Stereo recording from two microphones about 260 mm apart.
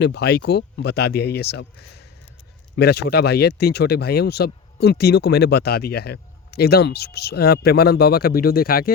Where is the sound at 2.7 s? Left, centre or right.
Left.